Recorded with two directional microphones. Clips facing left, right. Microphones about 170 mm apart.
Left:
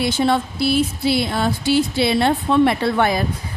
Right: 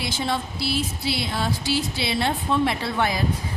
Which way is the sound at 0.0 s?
55° left (ahead or behind).